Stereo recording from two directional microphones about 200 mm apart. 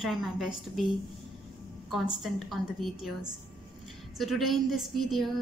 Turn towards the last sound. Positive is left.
turn(degrees=0)  # may be behind; listen again after turning